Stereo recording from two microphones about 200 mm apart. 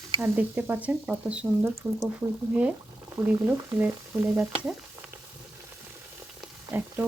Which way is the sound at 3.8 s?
10° right (ahead or behind).